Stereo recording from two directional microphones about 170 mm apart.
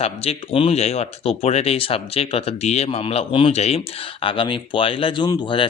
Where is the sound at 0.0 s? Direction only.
35° left (ahead or behind).